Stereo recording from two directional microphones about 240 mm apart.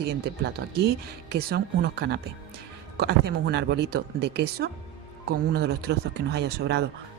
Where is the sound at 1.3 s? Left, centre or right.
Right.